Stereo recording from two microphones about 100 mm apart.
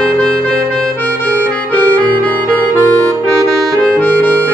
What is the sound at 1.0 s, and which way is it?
Harmonica, 15° left (ahead or behind).